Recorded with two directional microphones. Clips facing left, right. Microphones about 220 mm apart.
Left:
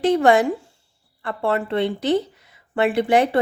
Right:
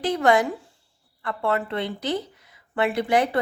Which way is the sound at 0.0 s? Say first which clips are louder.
Left 4 dB; 30° left (ahead or behind).